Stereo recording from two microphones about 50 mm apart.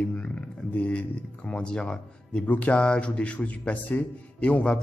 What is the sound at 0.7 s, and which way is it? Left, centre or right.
Speech, left.